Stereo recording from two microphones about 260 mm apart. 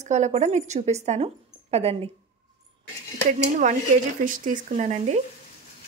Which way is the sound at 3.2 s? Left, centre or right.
Right.